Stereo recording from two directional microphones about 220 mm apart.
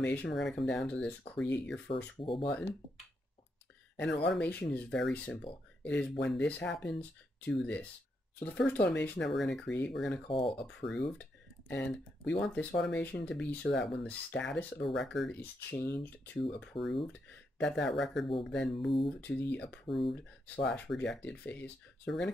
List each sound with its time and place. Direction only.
0.0 s speech: 5° left (ahead or behind)
2.1 s speech: 25° left (ahead or behind)
2.4 s speech: 5° left (ahead or behind)
3.9 s speech: 5° left (ahead or behind)
10.2 s speech: 25° left (ahead or behind)
10.6 s speech: centre (ahead or behind)
11.0 s a sound: 5° left (ahead or behind)
12.4 s speech: 5° left (ahead or behind)
16.7 s speech: 25° left (ahead or behind)
17.6 s speech: centre (ahead or behind)